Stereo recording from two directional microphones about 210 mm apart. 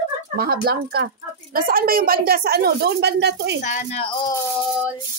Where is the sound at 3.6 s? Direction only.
35° left (ahead or behind).